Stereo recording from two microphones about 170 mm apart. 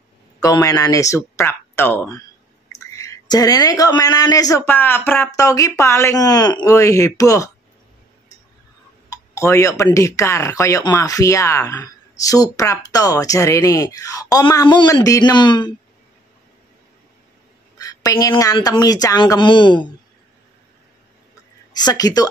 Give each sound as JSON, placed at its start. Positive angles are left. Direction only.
{"t": 0.4, "sound": "speech", "side_deg": 20}
{"t": 9.1, "sound": "speech", "side_deg": 15}
{"t": 17.7, "sound": "speech", "side_deg": 20}
{"t": 21.7, "sound": "speech", "side_deg": 25}